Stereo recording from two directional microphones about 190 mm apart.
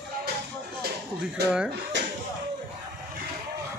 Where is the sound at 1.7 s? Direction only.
65° right (ahead or behind).